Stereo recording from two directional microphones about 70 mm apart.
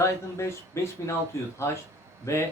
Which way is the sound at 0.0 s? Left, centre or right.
Left.